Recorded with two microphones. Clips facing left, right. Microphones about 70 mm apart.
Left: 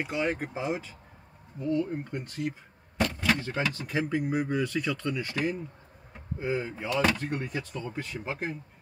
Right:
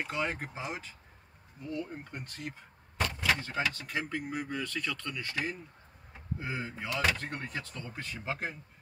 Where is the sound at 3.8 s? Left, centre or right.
Centre.